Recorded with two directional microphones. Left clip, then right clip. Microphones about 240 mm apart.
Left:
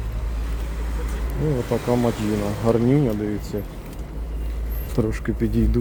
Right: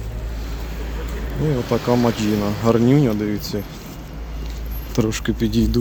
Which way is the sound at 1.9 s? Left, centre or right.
Centre.